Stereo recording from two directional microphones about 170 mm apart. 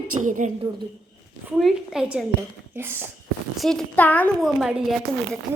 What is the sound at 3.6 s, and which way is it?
Speech, 5° left (ahead or behind).